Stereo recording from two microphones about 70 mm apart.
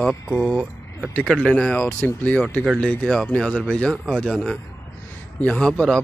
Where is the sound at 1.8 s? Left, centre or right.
Left.